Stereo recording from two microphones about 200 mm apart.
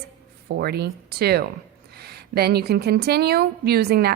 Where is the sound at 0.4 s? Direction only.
55° right (ahead or behind).